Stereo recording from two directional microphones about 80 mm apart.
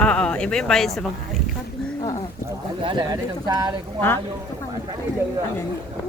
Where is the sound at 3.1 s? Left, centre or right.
Right.